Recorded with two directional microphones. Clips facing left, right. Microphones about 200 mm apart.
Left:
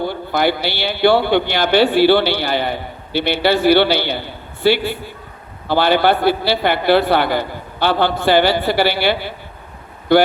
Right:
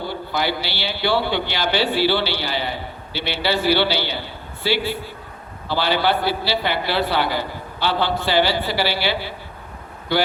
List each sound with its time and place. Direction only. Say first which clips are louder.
0.0 s a man's voice: left 6 dB; 55° left (ahead or behind)